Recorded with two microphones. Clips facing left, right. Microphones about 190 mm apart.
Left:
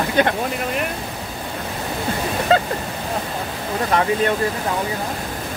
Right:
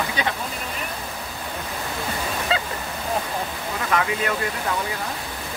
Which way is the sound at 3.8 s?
35° left (ahead or behind).